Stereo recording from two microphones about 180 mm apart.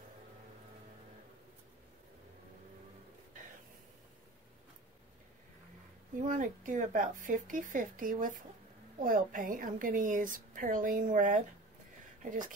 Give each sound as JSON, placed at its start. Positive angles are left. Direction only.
{"t": 6.2, "sound": "a woman's voice", "side_deg": -45}